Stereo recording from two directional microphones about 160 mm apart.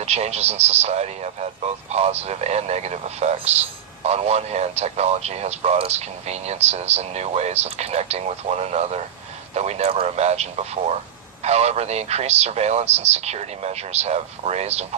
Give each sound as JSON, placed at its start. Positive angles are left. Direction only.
{"t": 0.0, "sound": "a man's voice", "side_deg": -40}